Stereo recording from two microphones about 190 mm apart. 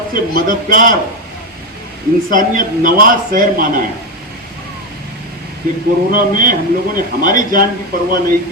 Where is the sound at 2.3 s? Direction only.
45° right (ahead or behind).